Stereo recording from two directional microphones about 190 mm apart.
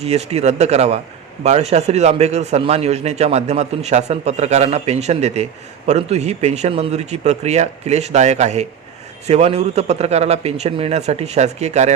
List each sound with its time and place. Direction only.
0.0 s a man's voice: 35° right (ahead or behind)